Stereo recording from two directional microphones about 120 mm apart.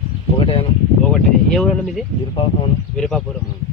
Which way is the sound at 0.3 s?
50° left (ahead or behind).